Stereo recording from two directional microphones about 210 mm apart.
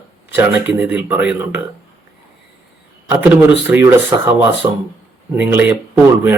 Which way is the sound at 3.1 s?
10° right (ahead or behind).